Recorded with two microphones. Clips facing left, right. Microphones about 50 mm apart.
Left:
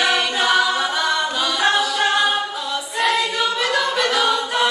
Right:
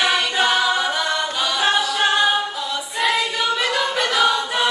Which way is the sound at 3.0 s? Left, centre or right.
Centre.